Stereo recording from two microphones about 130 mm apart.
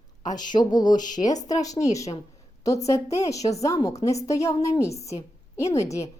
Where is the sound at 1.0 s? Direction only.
75° left (ahead or behind).